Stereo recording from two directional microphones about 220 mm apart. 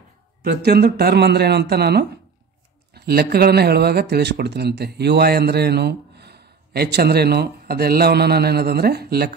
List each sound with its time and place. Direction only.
0.4 s speech: 45° right (ahead or behind)